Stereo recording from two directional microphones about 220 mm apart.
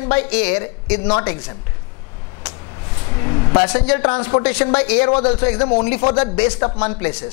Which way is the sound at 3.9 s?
20° left (ahead or behind).